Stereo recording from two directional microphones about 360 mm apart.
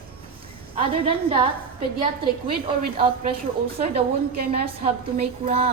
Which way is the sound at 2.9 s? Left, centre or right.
Centre.